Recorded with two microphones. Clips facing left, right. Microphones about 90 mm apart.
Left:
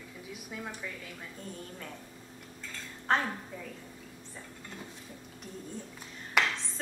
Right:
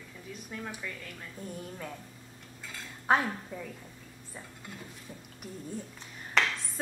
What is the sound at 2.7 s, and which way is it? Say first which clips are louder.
Dishes: right 3 dB; 10° right (ahead or behind).